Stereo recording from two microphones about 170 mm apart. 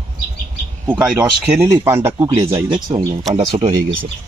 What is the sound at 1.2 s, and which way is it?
Speech, 10° right (ahead or behind).